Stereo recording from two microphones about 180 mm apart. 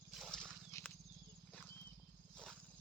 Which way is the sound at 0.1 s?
Centre (ahead or behind).